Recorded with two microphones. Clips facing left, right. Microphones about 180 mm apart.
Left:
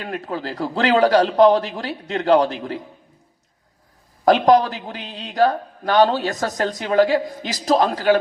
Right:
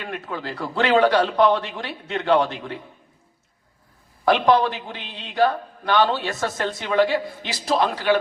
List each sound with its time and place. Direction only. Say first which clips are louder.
0.0 s a man's voice: left 3 dB; 35° left (ahead or behind)
4.3 s a man's voice: left 3 dB; 40° left (ahead or behind)